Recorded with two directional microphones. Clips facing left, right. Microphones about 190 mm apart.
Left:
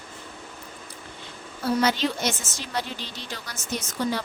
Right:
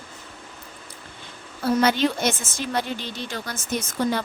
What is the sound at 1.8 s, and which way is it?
A woman's voice, 55° right (ahead or behind).